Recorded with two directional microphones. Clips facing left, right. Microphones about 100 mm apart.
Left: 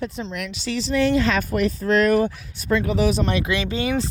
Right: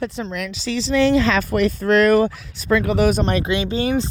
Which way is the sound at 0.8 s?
90° right.